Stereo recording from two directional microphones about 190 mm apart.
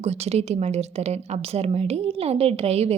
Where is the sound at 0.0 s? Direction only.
35° right (ahead or behind).